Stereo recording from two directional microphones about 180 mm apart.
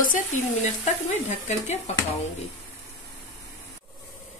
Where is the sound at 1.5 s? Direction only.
40° left (ahead or behind).